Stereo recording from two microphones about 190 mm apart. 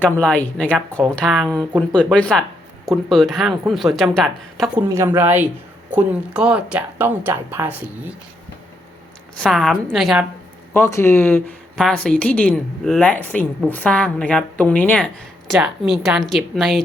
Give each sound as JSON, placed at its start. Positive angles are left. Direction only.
{"t": 0.0, "sound": "a woman's voice", "side_deg": 5}
{"t": 1.5, "sound": "speech", "side_deg": -15}
{"t": 1.9, "sound": "a woman's voice", "side_deg": 5}
{"t": 4.9, "sound": "speech", "side_deg": -10}
{"t": 9.4, "sound": "a woman's voice", "side_deg": 0}
{"t": 10.8, "sound": "a woman's voice", "side_deg": 15}